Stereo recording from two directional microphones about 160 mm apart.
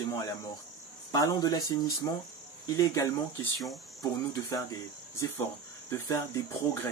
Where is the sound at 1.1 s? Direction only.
25° left (ahead or behind).